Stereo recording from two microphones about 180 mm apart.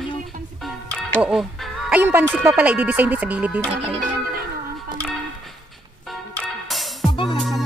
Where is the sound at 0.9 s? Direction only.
Centre (ahead or behind).